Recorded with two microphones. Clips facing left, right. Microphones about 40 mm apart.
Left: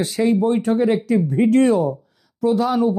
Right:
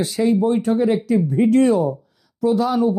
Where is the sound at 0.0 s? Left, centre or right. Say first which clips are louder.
Even; left.